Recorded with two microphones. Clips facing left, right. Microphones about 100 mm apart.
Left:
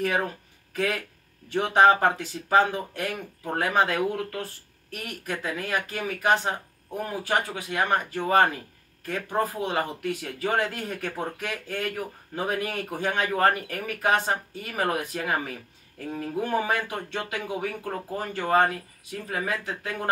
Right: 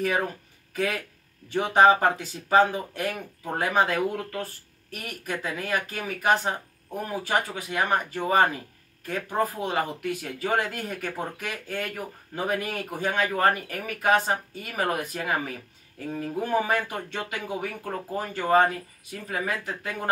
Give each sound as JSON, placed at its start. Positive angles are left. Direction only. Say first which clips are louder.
{"t": 0.0, "sound": "speech", "louder": "even", "side_deg": -5}
{"t": 16.1, "sound": "speech", "louder": "right 1 dB", "side_deg": -5}
{"t": 17.5, "sound": "speech", "louder": "left 1 dB", "side_deg": 5}
{"t": 18.1, "sound": "speech", "louder": "right 2 dB", "side_deg": -10}